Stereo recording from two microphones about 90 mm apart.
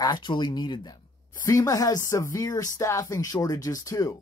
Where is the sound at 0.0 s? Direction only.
55° left (ahead or behind).